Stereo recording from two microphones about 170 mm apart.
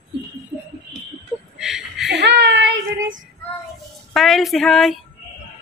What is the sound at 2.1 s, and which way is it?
Speech, 90° right.